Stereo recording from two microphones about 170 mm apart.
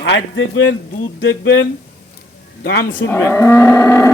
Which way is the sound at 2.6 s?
60° left (ahead or behind).